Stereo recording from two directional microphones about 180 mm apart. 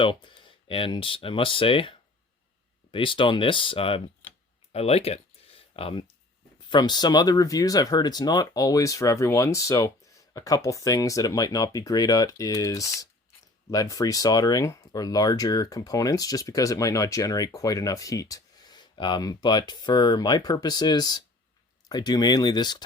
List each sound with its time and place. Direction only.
0.0 s speech: 25° left (ahead or behind)
4.7 s a sound: 35° left (ahead or behind)
6.7 s speech: 25° left (ahead or behind)